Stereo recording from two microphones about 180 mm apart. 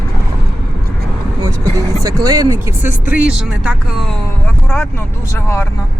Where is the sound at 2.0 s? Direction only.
20° right (ahead or behind); by 3.7 s 5° right (ahead or behind).